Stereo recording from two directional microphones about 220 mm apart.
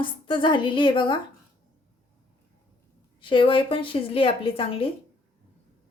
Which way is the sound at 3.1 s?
25° left (ahead or behind).